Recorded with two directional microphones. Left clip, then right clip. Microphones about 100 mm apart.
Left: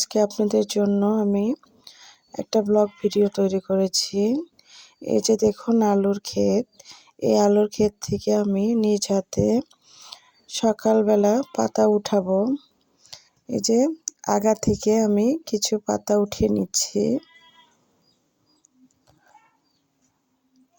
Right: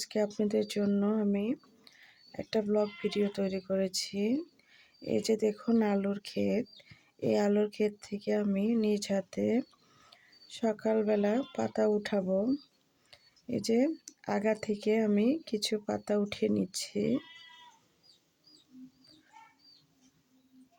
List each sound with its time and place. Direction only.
0.0 s speech: 70° left (ahead or behind)
0.9 s speech: 50° left (ahead or behind)
1.3 s a sound: 65° left (ahead or behind)
2.7 s speech: 55° left (ahead or behind)
12.3 s speech: 40° left (ahead or behind)
13.1 s a sound: 55° left (ahead or behind)
14.6 s speech: 55° left (ahead or behind)